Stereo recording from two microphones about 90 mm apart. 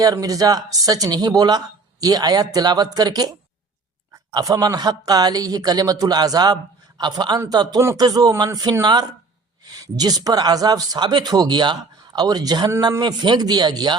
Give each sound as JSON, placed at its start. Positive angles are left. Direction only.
{"t": 0.0, "sound": "speech", "side_deg": -45}